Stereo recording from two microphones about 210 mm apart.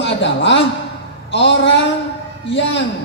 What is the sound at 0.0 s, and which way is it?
A man's voice, 55° left (ahead or behind).